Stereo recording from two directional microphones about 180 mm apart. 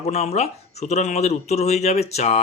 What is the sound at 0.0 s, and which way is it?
Speech, 35° left (ahead or behind).